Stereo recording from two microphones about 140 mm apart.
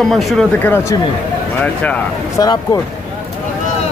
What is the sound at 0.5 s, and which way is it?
Speech, 15° left (ahead or behind).